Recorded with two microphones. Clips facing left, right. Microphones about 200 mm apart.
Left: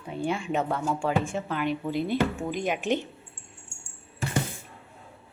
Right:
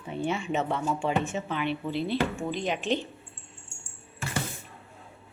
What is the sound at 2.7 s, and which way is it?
Speech, 15° left (ahead or behind).